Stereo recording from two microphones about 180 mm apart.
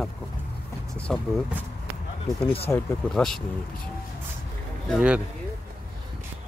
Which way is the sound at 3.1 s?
Centre (ahead or behind).